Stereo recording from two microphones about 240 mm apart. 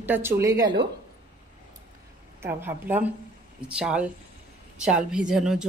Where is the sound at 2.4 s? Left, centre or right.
Centre.